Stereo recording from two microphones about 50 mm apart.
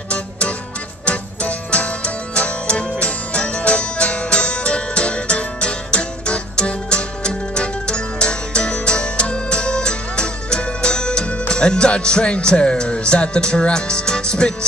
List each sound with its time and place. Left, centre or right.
0.1 s music: left